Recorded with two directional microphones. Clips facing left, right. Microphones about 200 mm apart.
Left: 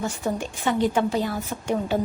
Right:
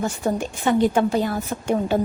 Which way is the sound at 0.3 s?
50° right (ahead or behind).